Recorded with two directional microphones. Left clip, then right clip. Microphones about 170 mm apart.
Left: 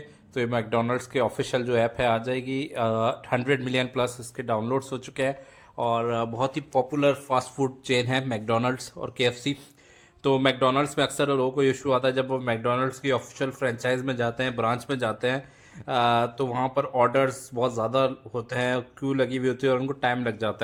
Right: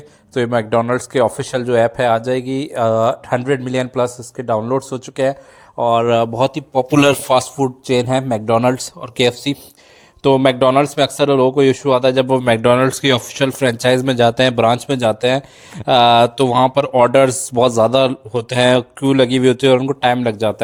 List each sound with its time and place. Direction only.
0.3 s speech: 30° right (ahead or behind)
5.9 s speech: 45° right (ahead or behind)
6.2 s speech: 30° right (ahead or behind)
6.9 s a man's voice: 85° right
7.3 s speech: 40° right (ahead or behind)